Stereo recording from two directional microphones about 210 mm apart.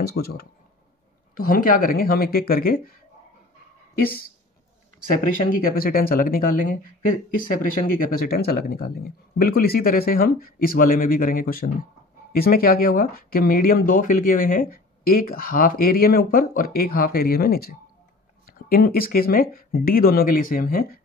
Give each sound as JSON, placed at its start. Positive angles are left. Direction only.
{"t": 0.0, "sound": "speech", "side_deg": 50}
{"t": 4.0, "sound": "speech", "side_deg": 45}